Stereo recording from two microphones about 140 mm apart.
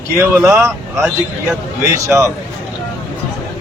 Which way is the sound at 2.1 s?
20° right (ahead or behind).